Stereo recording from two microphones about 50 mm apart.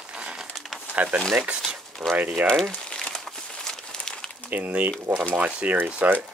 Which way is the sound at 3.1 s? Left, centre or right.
Centre.